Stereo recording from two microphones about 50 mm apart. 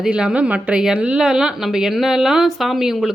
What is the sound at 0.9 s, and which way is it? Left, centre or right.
Speech, right.